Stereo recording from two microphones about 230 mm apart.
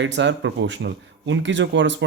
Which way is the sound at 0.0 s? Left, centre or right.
Right.